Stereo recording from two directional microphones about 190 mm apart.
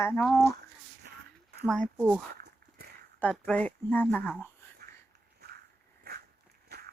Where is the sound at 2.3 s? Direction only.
55° right (ahead or behind).